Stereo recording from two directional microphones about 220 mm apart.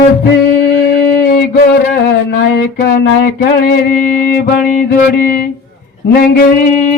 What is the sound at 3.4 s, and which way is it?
Music, 45° left (ahead or behind).